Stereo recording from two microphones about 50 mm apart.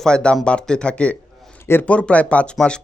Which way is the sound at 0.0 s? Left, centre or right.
Centre.